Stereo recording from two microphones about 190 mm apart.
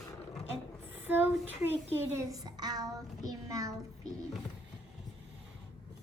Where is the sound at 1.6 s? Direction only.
10° right (ahead or behind).